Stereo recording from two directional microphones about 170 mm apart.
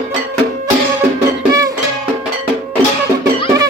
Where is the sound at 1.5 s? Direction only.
20° right (ahead or behind).